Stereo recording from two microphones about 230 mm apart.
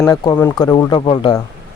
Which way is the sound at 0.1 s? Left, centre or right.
Centre.